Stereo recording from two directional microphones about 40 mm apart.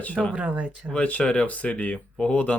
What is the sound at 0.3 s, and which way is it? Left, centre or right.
Speech, right.